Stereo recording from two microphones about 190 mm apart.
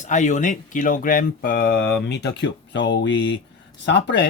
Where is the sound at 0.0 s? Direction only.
40° left (ahead or behind).